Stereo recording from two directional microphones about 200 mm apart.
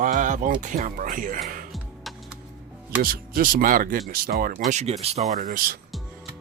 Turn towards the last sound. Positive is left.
turn(degrees=-45)  # may be behind; listen again after turning